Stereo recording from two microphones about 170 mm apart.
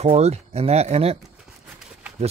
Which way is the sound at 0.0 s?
40° right (ahead or behind).